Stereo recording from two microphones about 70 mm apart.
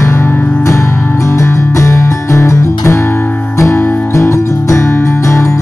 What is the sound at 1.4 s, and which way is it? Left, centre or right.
Music, left.